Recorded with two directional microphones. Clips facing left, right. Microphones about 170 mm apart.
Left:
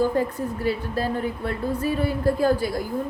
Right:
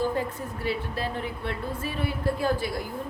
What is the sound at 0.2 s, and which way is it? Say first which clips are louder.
A woman's voice: left 6 dB; 40° left (ahead or behind).